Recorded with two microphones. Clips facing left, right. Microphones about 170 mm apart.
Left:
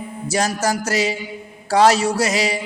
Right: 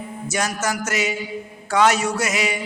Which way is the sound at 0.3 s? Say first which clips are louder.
Left 4 dB; 35° left (ahead or behind).